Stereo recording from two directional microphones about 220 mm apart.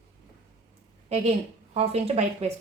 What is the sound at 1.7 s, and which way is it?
Speech, 30° right (ahead or behind).